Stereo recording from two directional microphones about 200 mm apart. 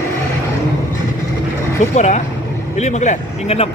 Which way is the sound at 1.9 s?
35° left (ahead or behind).